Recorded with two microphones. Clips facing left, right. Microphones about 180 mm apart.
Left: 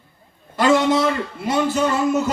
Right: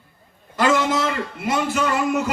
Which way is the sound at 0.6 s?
25° left (ahead or behind).